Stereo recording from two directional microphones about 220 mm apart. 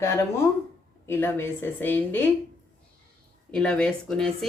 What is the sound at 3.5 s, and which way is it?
Speech, 5° left (ahead or behind).